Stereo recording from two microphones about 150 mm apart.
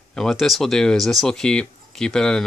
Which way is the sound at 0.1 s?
Centre (ahead or behind).